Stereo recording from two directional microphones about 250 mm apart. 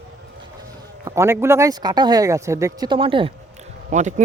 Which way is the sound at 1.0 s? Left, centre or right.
Centre.